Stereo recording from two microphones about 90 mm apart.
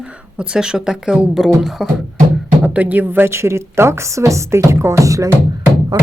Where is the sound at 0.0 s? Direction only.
10° right (ahead or behind).